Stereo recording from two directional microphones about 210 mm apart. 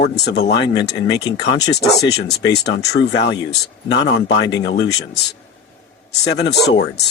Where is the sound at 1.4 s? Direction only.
55° left (ahead or behind).